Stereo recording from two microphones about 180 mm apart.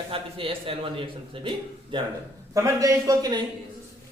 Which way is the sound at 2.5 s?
15° right (ahead or behind).